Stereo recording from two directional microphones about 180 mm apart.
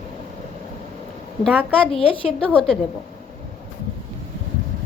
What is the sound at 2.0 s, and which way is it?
Speech, 30° left (ahead or behind).